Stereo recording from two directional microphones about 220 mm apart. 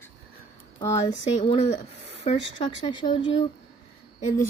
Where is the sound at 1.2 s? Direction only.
30° left (ahead or behind).